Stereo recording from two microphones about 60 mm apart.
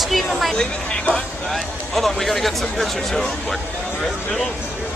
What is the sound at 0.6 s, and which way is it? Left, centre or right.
Speech, centre.